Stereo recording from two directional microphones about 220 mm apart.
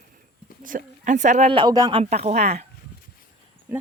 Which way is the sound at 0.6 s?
35° right (ahead or behind).